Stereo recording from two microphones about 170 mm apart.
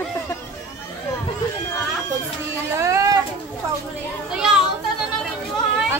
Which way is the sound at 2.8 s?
15° right (ahead or behind).